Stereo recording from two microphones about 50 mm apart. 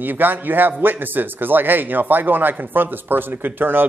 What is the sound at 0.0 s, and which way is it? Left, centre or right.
A man's voice, right.